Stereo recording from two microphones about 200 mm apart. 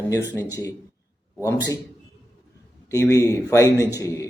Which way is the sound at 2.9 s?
15° left (ahead or behind).